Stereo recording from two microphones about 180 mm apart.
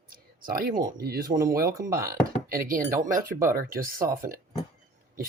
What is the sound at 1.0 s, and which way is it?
Speech, 55° right (ahead or behind).